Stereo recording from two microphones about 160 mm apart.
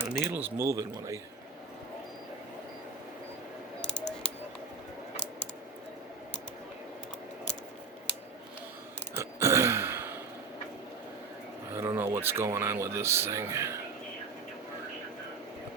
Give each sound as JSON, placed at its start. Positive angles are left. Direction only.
{"t": 0.1, "sound": "speech", "side_deg": -10}
{"t": 3.8, "sound": "a sound", "side_deg": 5}
{"t": 9.1, "sound": "burping", "side_deg": -15}
{"t": 11.7, "sound": "speech", "side_deg": -15}